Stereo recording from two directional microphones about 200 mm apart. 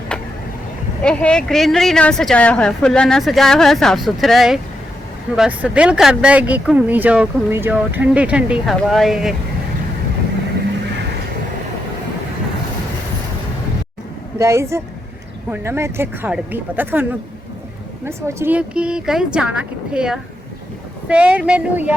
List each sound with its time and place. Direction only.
0.1 s vehicle: 5° left (ahead or behind)
1.0 s a woman's voice: 5° left (ahead or behind)
14.3 s a woman's voice: 15° right (ahead or behind)